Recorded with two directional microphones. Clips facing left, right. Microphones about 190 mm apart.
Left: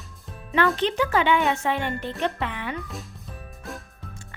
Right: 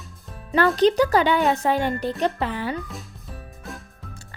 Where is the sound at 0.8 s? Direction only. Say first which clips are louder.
Right 6 dB; 40° right (ahead or behind).